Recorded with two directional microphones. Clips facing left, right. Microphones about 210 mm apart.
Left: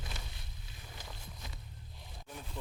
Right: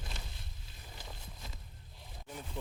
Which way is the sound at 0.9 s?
Centre (ahead or behind).